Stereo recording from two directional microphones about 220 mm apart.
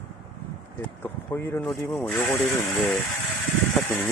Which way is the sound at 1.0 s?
10° left (ahead or behind).